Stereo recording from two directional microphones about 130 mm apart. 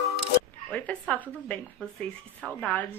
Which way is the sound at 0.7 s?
10° left (ahead or behind).